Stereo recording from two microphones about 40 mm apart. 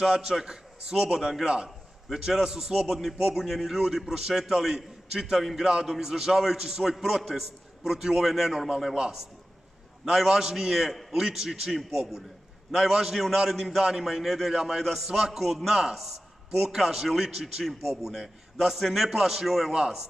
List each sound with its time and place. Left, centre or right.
0.0 s a man's voice: centre
1.4 s a man's voice: right
2.0 s a man's voice: centre
5.4 s a man's voice: centre
5.7 s a man's voice: centre
10.0 s a man's voice: centre